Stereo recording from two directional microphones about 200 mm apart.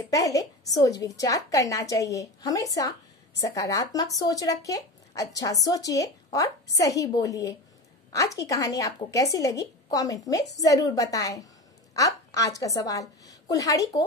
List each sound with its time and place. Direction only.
0.1 s a woman's voice: 15° left (ahead or behind)